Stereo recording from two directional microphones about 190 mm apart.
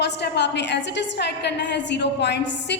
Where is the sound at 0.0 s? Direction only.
65° left (ahead or behind).